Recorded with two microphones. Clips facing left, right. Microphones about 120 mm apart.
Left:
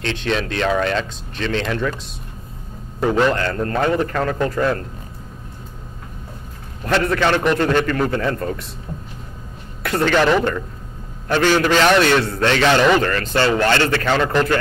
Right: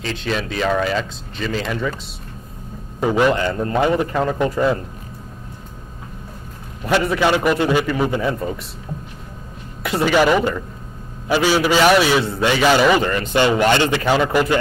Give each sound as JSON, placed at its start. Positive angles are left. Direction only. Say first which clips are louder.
{"t": 0.0, "sound": "speech", "louder": "left 2 dB", "side_deg": 0}
{"t": 3.0, "sound": "a man's voice", "louder": "right 1 dB", "side_deg": -10}
{"t": 6.8, "sound": "a man's voice", "louder": "right 1 dB", "side_deg": -10}
{"t": 9.8, "sound": "a man's voice", "louder": "right 1 dB", "side_deg": -10}